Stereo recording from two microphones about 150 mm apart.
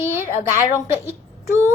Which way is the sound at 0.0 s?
15° right (ahead or behind).